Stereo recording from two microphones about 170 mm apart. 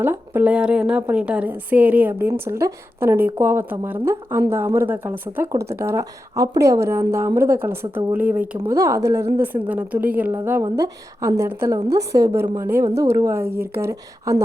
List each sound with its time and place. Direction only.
0.0 s a woman's voice: 10° right (ahead or behind)